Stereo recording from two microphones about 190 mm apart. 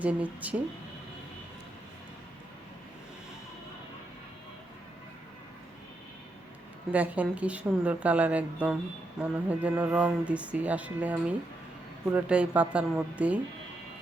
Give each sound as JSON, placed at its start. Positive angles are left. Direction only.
{"t": 0.0, "sound": "speech", "side_deg": -10}
{"t": 6.9, "sound": "speech", "side_deg": -10}
{"t": 9.2, "sound": "mantra", "side_deg": 0}
{"t": 9.5, "sound": "speech", "side_deg": -10}